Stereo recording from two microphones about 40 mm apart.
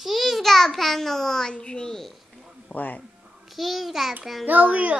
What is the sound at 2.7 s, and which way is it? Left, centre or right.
Speech, left.